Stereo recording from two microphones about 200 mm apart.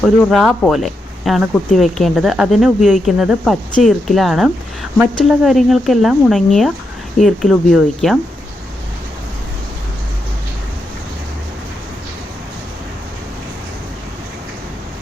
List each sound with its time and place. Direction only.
0.0 s speech: centre (ahead or behind)